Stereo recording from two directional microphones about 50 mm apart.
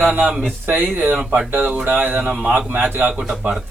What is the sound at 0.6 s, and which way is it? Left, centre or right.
Speech, right.